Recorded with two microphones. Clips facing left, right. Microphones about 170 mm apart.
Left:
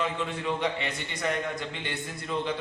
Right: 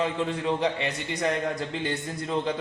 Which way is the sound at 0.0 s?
30° right (ahead or behind).